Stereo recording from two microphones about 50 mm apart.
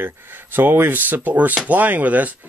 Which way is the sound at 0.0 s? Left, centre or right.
Right.